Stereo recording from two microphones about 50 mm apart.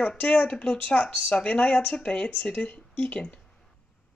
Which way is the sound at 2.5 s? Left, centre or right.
Left.